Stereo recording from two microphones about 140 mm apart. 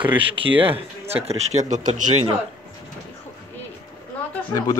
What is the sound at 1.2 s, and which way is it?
Speech, 60° right (ahead or behind).